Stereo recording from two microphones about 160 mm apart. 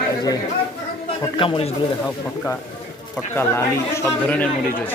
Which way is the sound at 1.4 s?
35° left (ahead or behind).